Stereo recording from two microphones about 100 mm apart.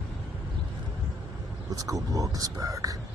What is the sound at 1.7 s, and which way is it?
Speech, 35° right (ahead or behind).